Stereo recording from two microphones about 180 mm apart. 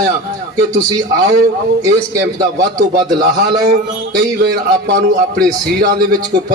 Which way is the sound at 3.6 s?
60° right (ahead or behind).